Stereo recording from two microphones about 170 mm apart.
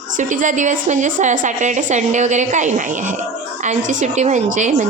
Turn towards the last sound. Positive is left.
turn(degrees=-45)  # may be behind; listen again after turning